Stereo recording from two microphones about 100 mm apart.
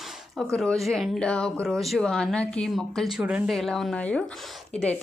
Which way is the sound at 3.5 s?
5° left (ahead or behind).